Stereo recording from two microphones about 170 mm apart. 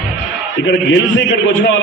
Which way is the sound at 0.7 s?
90° left.